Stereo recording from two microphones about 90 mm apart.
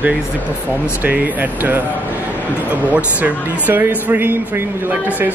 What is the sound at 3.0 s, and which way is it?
A man's voice, 15° right (ahead or behind).